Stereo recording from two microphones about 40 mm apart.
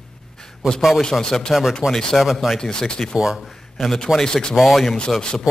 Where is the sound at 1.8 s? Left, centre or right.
Right.